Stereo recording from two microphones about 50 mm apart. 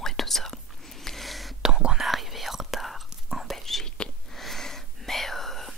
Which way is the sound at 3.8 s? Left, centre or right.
Centre.